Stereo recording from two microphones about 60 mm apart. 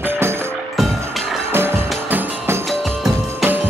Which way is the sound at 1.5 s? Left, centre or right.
Right.